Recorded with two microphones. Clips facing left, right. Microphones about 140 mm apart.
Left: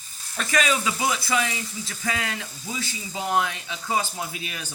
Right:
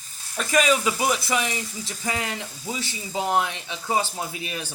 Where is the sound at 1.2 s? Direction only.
20° right (ahead or behind).